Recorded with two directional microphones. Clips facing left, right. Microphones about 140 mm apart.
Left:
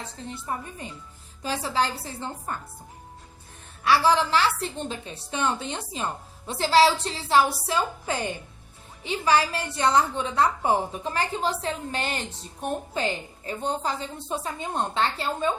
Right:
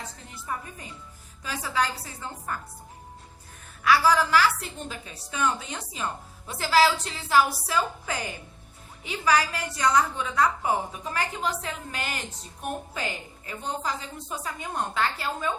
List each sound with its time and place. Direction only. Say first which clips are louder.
0.3 s a woman's voice: left 3 dB; 30° left (ahead or behind)
3.8 s a woman's voice: left 1 dB; 25° left (ahead or behind)